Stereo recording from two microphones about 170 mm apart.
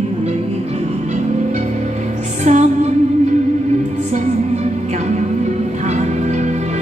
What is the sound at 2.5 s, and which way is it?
Music, 45° right (ahead or behind).